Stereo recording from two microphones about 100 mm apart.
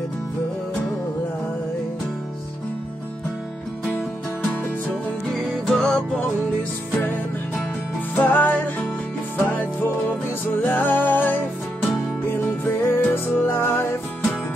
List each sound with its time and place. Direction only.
3.9 s music: 15° left (ahead or behind)
5.3 s music: centre (ahead or behind)
8.2 s music: 15° left (ahead or behind)